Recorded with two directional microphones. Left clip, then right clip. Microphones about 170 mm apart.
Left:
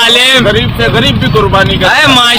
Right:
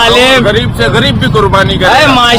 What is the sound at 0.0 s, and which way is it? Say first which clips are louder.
Vehicle: even; 5° right (ahead or behind).